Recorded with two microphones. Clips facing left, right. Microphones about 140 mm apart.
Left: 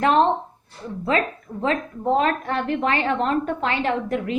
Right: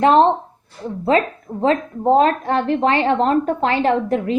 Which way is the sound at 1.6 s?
35° right (ahead or behind).